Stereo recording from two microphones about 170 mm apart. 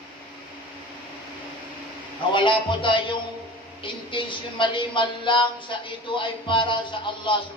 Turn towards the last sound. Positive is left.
turn(degrees=30)  # may be behind; listen again after turning